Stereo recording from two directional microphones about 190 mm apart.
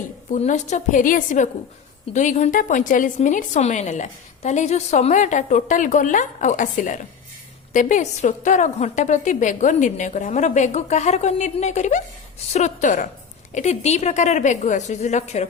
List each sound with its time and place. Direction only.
0.3 s a woman's voice: 40° left (ahead or behind)